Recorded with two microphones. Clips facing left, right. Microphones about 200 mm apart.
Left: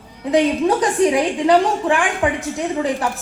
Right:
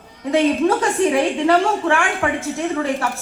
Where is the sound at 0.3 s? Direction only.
15° left (ahead or behind).